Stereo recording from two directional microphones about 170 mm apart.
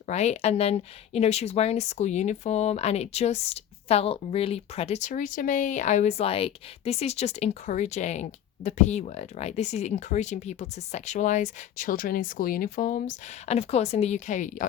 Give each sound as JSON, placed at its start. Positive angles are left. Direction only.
{"t": 0.1, "sound": "speech", "side_deg": 40}